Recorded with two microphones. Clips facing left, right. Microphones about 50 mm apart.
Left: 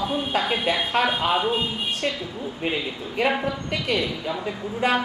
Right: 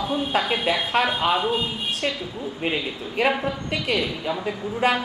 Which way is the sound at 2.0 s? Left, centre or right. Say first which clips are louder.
Even; centre.